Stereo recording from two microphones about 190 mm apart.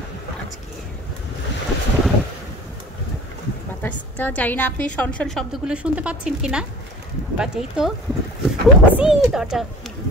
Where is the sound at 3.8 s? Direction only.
10° left (ahead or behind).